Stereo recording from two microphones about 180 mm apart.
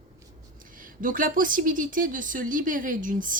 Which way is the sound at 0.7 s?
50° right (ahead or behind).